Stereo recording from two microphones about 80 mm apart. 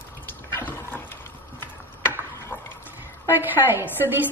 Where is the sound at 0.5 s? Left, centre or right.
Left.